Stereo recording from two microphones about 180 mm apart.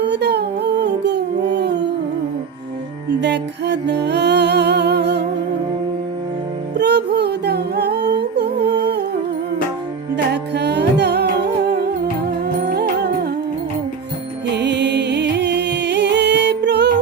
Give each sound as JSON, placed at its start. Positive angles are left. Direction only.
{"t": 0.0, "sound": "music", "side_deg": -70}
{"t": 3.2, "sound": "music", "side_deg": -70}
{"t": 6.7, "sound": "music", "side_deg": -70}
{"t": 10.3, "sound": "music", "side_deg": -70}
{"t": 12.7, "sound": "music", "side_deg": -65}
{"t": 14.4, "sound": "music", "side_deg": -70}